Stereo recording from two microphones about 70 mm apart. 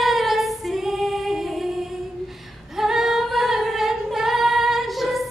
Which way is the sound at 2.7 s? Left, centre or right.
Centre.